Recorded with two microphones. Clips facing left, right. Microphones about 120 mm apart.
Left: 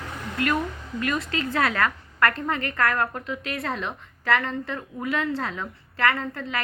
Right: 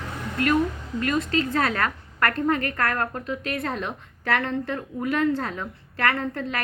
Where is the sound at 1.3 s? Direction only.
40° right (ahead or behind).